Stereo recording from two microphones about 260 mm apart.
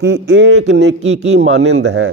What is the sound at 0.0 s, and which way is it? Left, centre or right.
A man's voice, right.